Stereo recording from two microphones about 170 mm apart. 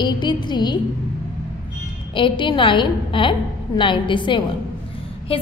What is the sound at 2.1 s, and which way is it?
A woman's voice, 30° left (ahead or behind).